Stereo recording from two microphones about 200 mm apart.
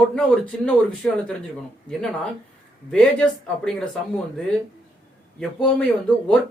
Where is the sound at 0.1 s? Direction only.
5° left (ahead or behind).